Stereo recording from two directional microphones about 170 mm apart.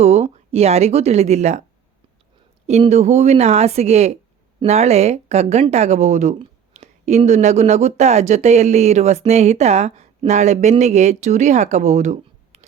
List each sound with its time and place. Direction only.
0.0 s speech: 40° right (ahead or behind)
2.9 s speech: 40° right (ahead or behind)
6.4 s a sound: 40° right (ahead or behind)
7.2 s speech: 40° right (ahead or behind)